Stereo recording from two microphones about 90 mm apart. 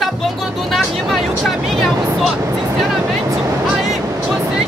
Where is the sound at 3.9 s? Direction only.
5° right (ahead or behind).